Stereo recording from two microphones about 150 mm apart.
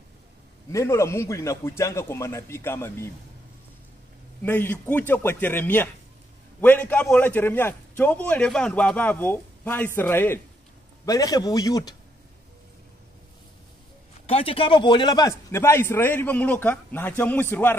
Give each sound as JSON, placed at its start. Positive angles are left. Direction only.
{"t": 0.7, "sound": "a man's voice", "side_deg": 20}
{"t": 4.4, "sound": "a man's voice", "side_deg": 15}
{"t": 14.2, "sound": "a man's voice", "side_deg": 40}